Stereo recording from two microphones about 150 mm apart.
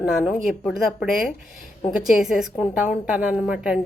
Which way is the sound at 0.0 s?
5° right (ahead or behind).